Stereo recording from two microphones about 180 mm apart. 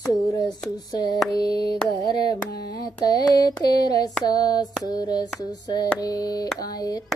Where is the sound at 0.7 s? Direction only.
20° left (ahead or behind).